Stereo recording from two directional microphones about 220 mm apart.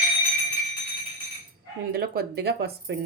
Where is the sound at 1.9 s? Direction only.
45° right (ahead or behind).